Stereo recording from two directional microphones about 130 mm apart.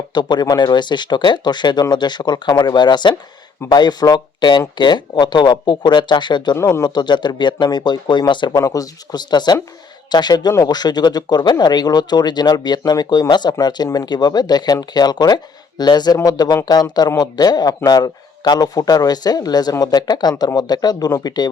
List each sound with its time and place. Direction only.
0.1 s speech: 35° left (ahead or behind)